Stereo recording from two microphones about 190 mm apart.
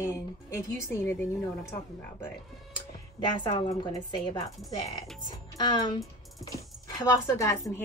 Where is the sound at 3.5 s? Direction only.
30° left (ahead or behind).